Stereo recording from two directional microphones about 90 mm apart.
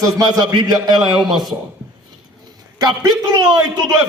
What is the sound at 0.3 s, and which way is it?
Speech, 50° right (ahead or behind).